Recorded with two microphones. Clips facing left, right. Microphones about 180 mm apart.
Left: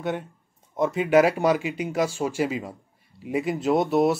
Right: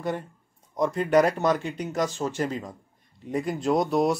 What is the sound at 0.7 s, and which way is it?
Speech, 5° left (ahead or behind).